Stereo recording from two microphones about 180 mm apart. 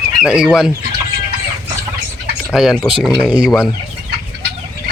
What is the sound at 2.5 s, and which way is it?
Speech, 5° right (ahead or behind).